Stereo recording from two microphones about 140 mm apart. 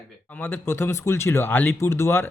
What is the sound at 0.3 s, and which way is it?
Speech, 15° left (ahead or behind).